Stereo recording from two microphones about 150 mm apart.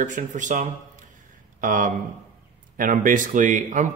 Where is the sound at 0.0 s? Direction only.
55° right (ahead or behind).